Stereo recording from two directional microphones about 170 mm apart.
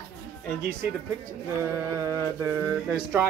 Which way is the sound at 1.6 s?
20° right (ahead or behind).